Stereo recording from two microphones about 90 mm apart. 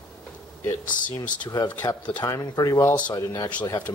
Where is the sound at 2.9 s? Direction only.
15° left (ahead or behind).